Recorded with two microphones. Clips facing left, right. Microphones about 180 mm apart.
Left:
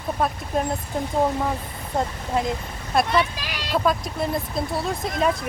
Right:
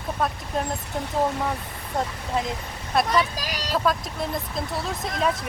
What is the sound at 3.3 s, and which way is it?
Speech, 40° right (ahead or behind).